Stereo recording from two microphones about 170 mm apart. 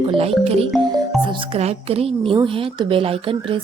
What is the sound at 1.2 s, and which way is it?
Speech, 30° right (ahead or behind).